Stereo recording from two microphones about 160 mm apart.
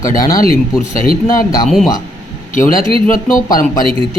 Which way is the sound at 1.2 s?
20° left (ahead or behind).